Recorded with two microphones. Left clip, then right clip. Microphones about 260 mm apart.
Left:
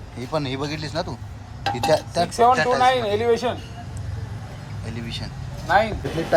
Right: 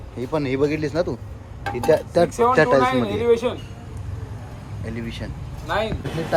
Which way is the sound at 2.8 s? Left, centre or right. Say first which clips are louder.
Left 1 dB; left.